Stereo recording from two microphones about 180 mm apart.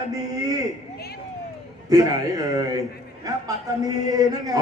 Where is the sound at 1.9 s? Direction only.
20° right (ahead or behind).